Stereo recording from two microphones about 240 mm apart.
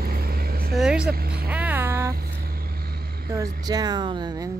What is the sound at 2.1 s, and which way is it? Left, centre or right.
Vehicle, right.